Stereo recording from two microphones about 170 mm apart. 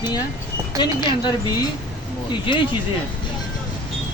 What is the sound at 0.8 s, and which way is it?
Speech, 25° left (ahead or behind).